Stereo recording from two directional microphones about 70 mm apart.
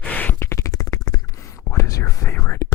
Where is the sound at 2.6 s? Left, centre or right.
Left.